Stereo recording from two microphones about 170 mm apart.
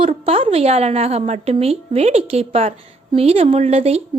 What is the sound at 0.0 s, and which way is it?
A woman's voice, 35° right (ahead or behind).